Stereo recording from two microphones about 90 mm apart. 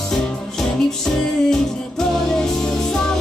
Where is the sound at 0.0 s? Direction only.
5° left (ahead or behind).